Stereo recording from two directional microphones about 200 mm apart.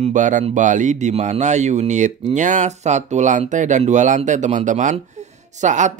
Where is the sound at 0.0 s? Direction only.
40° right (ahead or behind).